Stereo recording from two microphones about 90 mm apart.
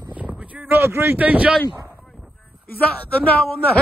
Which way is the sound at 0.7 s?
30° right (ahead or behind).